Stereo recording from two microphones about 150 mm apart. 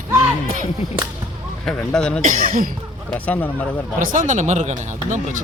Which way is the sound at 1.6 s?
5° left (ahead or behind).